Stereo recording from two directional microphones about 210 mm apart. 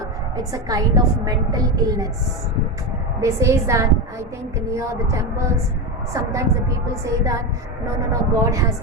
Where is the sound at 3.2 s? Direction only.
15° right (ahead or behind).